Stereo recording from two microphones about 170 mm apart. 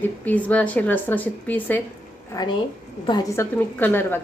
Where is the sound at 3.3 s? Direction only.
10° left (ahead or behind).